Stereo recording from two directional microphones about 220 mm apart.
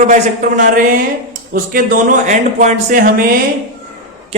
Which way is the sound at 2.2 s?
35° right (ahead or behind).